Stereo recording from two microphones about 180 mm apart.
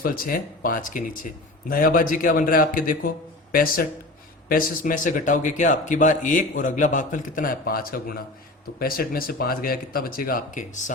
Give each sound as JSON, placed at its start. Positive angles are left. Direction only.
{"t": 0.0, "sound": "speech", "side_deg": 50}